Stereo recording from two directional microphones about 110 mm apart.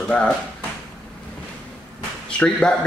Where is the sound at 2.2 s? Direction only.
10° left (ahead or behind).